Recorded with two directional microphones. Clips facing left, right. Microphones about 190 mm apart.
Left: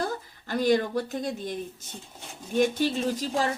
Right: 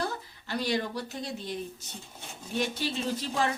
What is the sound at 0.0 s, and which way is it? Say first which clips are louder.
Speech: left 3 dB; 45° left (ahead or behind).